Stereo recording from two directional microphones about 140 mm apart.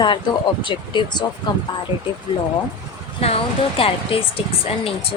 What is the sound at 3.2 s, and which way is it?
Speech, 45° left (ahead or behind).